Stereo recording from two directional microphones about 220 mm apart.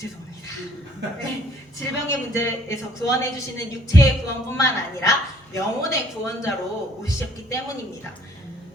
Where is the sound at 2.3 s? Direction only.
15° left (ahead or behind).